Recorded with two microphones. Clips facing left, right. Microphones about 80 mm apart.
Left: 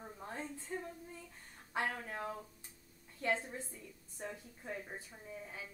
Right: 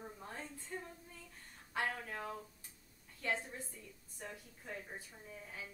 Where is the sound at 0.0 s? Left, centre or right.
Centre.